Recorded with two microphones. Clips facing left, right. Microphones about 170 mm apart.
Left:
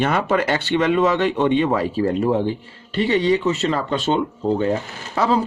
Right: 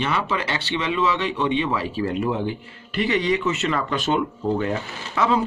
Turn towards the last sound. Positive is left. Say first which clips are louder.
# left 2 dB
turn(degrees=35)  # may be behind; listen again after turning